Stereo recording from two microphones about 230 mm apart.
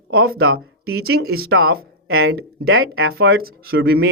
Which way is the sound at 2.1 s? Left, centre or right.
Right.